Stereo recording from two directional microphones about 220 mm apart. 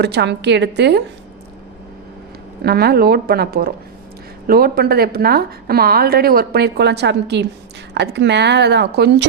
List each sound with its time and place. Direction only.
0.0 s a woman's voice: 50° right (ahead or behind)
2.6 s a woman's voice: 45° right (ahead or behind)